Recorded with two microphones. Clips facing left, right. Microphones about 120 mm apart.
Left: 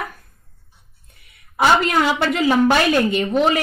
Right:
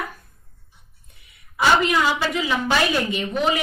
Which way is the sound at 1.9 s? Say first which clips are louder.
Left 3 dB; 55° left (ahead or behind).